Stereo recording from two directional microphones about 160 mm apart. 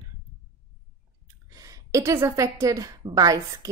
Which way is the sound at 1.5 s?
20° right (ahead or behind).